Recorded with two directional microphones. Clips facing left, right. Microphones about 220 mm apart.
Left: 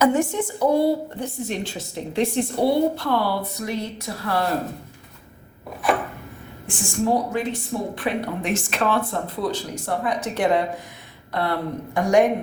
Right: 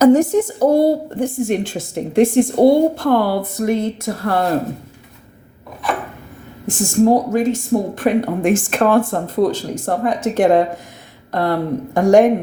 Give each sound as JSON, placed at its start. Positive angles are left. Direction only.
{"t": 0.0, "sound": "speech", "side_deg": -40}
{"t": 6.7, "sound": "speech", "side_deg": -40}